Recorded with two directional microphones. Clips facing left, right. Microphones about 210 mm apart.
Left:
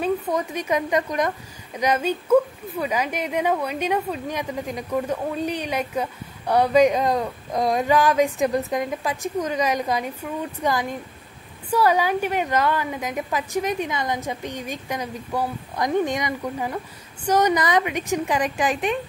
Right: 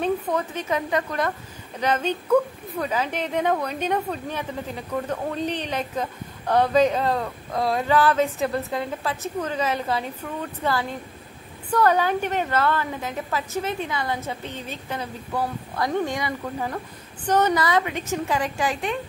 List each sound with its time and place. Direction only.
0.0 s a woman's voice: 10° left (ahead or behind)